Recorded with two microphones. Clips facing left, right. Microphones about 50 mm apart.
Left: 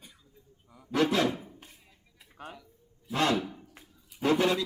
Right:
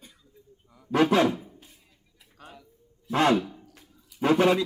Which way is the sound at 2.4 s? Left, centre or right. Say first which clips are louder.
Left 4 dB; left.